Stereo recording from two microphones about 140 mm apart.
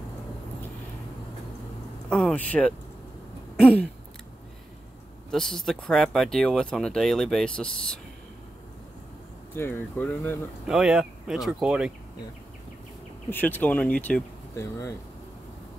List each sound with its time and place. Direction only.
2.0 s speech: 10° left (ahead or behind)
5.3 s speech: 5° left (ahead or behind)
9.6 s speech: 15° left (ahead or behind)
10.7 s speech: 5° right (ahead or behind)
13.3 s speech: 15° left (ahead or behind)
14.5 s speech: 20° left (ahead or behind)